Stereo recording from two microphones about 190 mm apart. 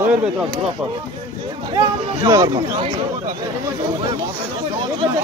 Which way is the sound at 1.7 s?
20° right (ahead or behind).